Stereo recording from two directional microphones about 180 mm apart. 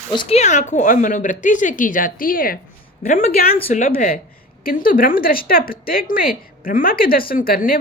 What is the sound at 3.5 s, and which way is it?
Speech, 30° left (ahead or behind).